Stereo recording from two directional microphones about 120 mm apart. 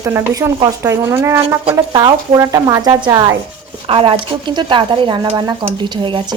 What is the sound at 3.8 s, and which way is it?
A woman's voice, 50° right (ahead or behind).